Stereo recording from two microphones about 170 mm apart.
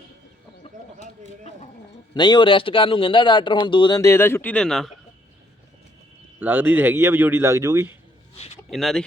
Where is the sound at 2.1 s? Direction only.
25° left (ahead or behind); by 4.9 s centre (ahead or behind).